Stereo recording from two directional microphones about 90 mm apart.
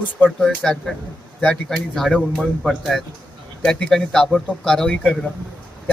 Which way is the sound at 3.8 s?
5° left (ahead or behind).